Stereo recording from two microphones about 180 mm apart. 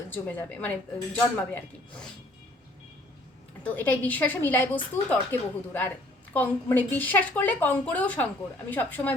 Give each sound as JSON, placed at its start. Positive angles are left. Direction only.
{"t": 0.1, "sound": "a woman's voice", "side_deg": 10}
{"t": 3.6, "sound": "a woman's voice", "side_deg": 10}